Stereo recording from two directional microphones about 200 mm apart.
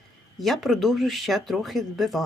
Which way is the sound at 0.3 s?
Centre (ahead or behind).